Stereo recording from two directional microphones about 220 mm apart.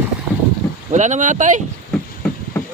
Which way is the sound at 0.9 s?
35° right (ahead or behind).